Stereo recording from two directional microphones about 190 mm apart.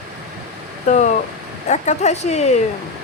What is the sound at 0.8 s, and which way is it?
Speech, 40° left (ahead or behind).